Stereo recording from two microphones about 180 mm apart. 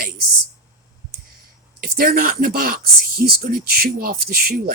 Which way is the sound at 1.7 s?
55° right (ahead or behind).